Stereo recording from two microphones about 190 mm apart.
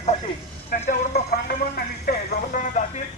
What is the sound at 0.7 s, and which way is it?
Speech, 55° left (ahead or behind).